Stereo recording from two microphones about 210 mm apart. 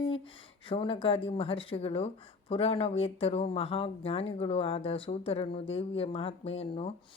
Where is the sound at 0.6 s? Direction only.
25° left (ahead or behind).